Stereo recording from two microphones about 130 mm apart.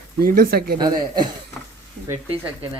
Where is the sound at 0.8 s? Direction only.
35° right (ahead or behind).